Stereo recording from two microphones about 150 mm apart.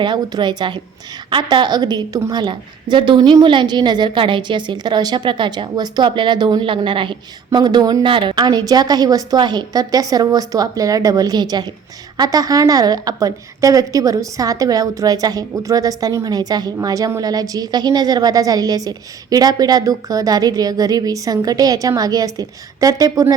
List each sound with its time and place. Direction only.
0.0 s a woman's voice: 30° right (ahead or behind)